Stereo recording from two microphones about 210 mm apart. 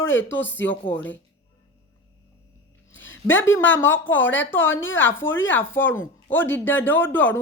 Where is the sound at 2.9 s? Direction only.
65° left (ahead or behind).